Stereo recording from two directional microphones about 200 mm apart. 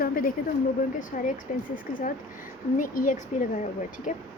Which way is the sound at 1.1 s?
40° left (ahead or behind).